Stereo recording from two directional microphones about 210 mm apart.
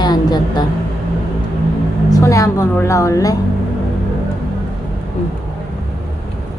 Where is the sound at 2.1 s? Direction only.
15° left (ahead or behind).